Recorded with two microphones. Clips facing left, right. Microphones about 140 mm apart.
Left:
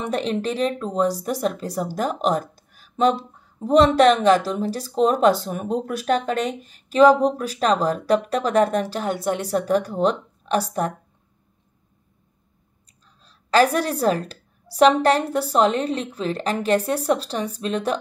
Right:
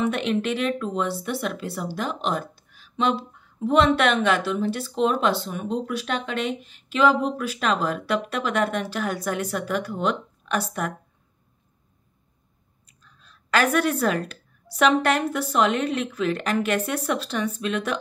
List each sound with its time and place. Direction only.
0.1 s speech: 35° left (ahead or behind)
12.8 s a woman's voice: 35° left (ahead or behind)